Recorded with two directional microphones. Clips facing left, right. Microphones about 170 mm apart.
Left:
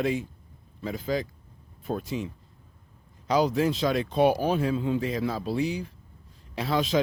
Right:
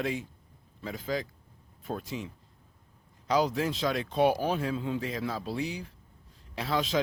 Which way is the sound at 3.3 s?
15° left (ahead or behind).